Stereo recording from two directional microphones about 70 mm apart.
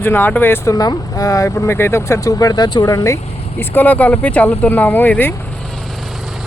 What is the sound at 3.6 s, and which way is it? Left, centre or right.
Speech, left.